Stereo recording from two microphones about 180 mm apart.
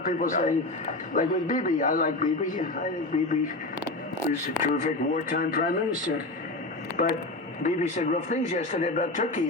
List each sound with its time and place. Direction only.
0.2 s a man's voice: 45° left (ahead or behind)
4.6 s a man's voice: 45° left (ahead or behind)
6.9 s a man's voice: 50° left (ahead or behind)